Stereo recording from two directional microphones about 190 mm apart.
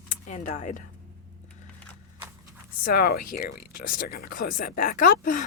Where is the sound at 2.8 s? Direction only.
55° left (ahead or behind).